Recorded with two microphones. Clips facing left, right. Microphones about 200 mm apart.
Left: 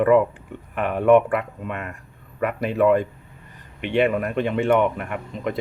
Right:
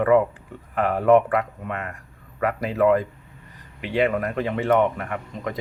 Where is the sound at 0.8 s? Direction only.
25° left (ahead or behind).